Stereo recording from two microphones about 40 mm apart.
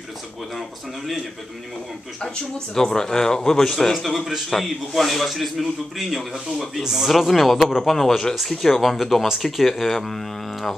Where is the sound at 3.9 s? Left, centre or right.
Centre.